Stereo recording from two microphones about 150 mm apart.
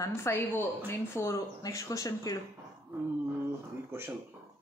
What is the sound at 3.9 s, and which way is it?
Speech, 15° right (ahead or behind).